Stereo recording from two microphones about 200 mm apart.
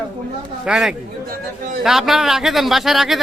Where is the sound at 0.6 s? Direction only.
5° right (ahead or behind).